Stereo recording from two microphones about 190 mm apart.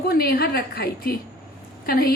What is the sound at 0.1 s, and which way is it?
A woman's voice, 55° left (ahead or behind).